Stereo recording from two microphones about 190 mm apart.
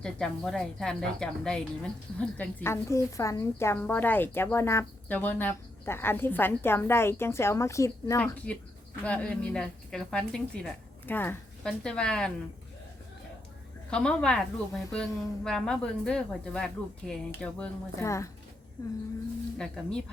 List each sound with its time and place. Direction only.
0.0 s a woman's voice: 5° left (ahead or behind)
13.9 s a woman's voice: 5° left (ahead or behind)
19.5 s a woman's voice: 5° left (ahead or behind)